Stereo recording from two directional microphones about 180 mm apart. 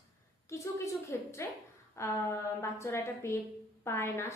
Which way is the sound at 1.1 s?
15° left (ahead or behind).